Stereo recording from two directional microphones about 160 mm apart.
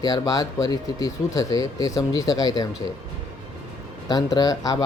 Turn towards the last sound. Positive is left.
turn(degrees=25)  # may be behind; listen again after turning